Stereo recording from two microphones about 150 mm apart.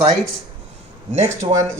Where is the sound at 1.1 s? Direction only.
50° right (ahead or behind).